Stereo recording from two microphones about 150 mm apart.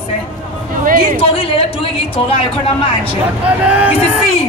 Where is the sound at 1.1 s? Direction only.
40° left (ahead or behind).